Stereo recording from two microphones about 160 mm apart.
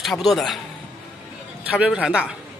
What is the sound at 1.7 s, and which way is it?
Speech, 5° right (ahead or behind).